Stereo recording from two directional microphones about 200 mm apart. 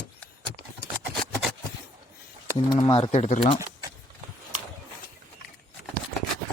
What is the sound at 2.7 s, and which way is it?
Speech, 25° left (ahead or behind).